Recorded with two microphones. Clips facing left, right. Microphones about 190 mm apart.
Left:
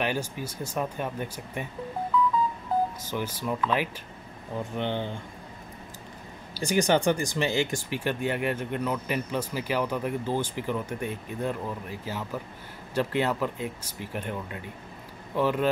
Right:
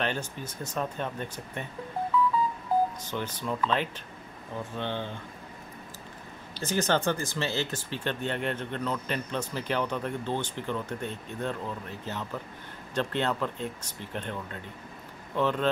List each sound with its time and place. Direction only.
0.0 s speech: 10° left (ahead or behind)
3.0 s speech: 10° left (ahead or behind)
6.6 s speech: 15° left (ahead or behind)